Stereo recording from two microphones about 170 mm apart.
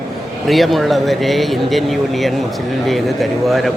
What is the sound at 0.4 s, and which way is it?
Speech, centre (ahead or behind).